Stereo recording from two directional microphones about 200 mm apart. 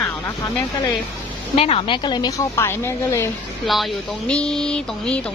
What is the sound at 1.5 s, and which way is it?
A woman's voice, 30° left (ahead or behind).